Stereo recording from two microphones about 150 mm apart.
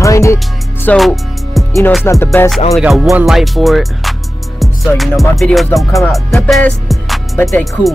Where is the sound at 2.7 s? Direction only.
Centre (ahead or behind).